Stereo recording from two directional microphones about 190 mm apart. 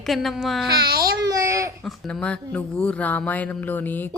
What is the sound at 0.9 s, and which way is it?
Speech, 50° right (ahead or behind).